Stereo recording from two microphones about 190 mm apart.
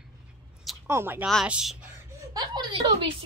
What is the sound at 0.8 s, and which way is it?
Speech, 10° right (ahead or behind).